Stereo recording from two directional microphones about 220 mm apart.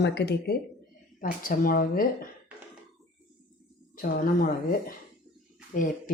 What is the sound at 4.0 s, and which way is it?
Speech, 40° left (ahead or behind).